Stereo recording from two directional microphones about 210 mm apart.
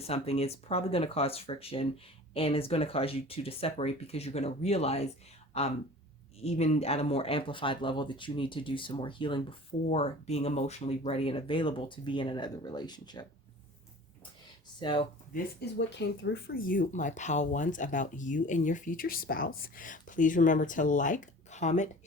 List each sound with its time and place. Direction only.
0.0 s speech: 30° left (ahead or behind)
14.8 s speech: 25° left (ahead or behind)
15.3 s speech: 40° left (ahead or behind)
15.9 s speech: 55° left (ahead or behind); by 21.8 s 35° left (ahead or behind)